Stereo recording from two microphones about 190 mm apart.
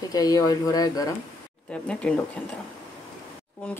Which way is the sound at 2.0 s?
5° left (ahead or behind).